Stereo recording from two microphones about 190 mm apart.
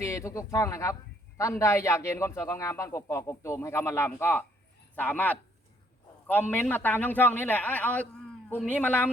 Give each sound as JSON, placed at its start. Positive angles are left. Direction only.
{"t": 0.0, "sound": "a man's voice", "side_deg": 15}
{"t": 6.5, "sound": "a man's voice", "side_deg": 10}